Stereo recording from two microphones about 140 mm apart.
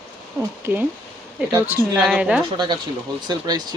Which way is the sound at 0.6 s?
15° right (ahead or behind).